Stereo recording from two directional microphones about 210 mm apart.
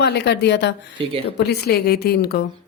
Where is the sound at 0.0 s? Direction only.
55° left (ahead or behind).